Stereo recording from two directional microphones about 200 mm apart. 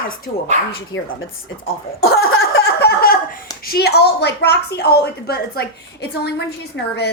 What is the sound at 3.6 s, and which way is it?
A woman's voice, 50° left (ahead or behind).